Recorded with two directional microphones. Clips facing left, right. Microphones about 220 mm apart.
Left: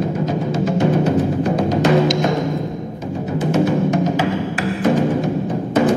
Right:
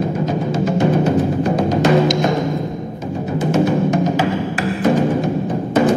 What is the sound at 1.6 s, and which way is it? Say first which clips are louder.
Music: right 1 dB; 45° right (ahead or behind).